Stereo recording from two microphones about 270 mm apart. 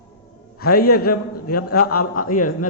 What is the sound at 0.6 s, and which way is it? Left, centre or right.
A man's voice, left.